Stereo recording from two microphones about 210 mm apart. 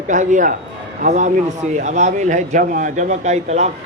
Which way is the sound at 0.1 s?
35° right (ahead or behind).